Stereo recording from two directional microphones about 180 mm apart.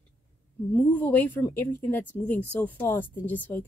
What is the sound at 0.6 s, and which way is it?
Speech, 10° left (ahead or behind).